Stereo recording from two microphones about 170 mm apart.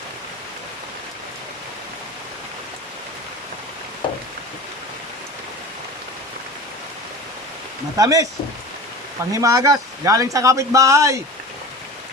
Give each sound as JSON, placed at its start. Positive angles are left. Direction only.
{"t": 7.9, "sound": "speech", "side_deg": -20}
{"t": 9.3, "sound": "speech", "side_deg": -20}